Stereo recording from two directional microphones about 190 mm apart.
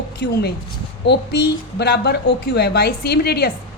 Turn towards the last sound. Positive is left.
turn(degrees=55)  # may be behind; listen again after turning